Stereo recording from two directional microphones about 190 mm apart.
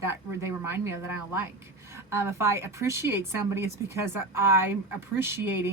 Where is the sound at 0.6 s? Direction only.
10° right (ahead or behind).